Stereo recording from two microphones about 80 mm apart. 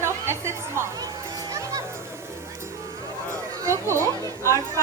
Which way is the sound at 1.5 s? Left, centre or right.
Right.